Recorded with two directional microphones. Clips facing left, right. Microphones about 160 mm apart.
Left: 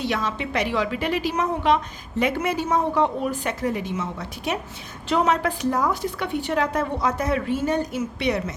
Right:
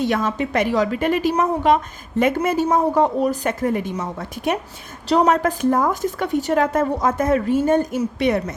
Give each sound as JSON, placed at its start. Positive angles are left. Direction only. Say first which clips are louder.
{"t": 0.0, "sound": "a woman's voice", "louder": "right 5 dB", "side_deg": -50}